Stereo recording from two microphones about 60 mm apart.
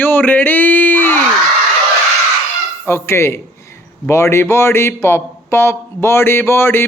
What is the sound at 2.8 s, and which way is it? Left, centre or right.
Speech, left.